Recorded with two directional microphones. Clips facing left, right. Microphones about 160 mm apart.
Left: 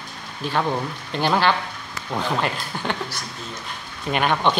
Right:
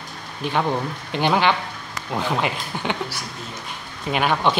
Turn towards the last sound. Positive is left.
turn(degrees=-5)  # may be behind; listen again after turning